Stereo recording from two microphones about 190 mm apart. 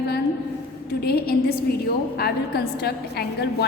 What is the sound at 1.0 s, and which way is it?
A woman's voice, 55° left (ahead or behind).